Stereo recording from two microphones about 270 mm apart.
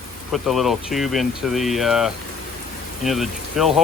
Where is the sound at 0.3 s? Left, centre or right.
Centre.